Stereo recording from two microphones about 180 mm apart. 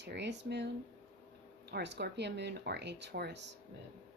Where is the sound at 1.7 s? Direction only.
70° right (ahead or behind).